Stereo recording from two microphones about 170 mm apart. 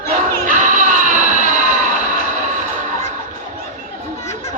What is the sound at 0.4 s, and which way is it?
Music, 50° right (ahead or behind).